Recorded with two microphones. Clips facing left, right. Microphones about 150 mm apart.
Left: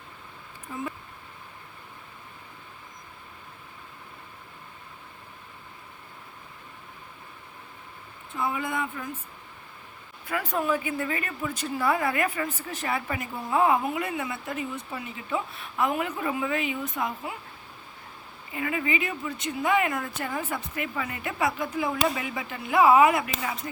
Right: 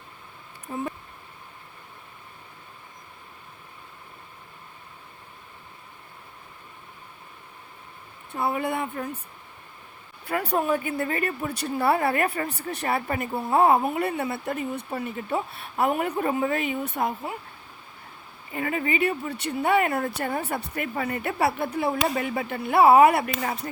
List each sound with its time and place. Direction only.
8.4 s speech: 35° right (ahead or behind)
10.2 s speech: 35° right (ahead or behind)
18.5 s speech: 40° right (ahead or behind)